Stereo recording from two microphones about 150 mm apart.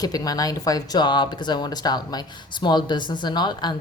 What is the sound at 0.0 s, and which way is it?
Speech, 25° left (ahead or behind).